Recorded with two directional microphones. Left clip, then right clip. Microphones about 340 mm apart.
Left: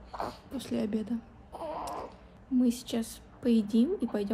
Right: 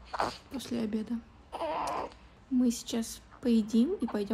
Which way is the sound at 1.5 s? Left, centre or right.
Right.